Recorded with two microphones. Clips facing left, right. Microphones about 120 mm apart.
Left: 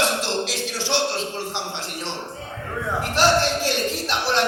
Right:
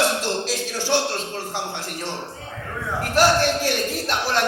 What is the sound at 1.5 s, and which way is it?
Speech, 45° right (ahead or behind).